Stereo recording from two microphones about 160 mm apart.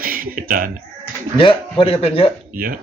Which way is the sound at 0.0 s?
60° right (ahead or behind).